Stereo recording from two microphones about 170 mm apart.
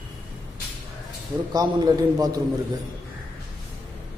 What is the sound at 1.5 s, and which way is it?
Speech, 20° right (ahead or behind).